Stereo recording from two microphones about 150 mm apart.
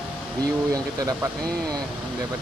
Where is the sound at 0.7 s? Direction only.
25° right (ahead or behind).